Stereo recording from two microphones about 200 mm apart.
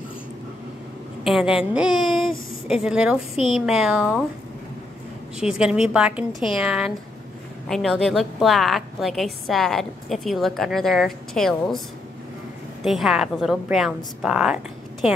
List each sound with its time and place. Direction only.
1.2 s a woman's voice: centre (ahead or behind)
5.4 s a woman's voice: 5° right (ahead or behind)
12.8 s a woman's voice: centre (ahead or behind)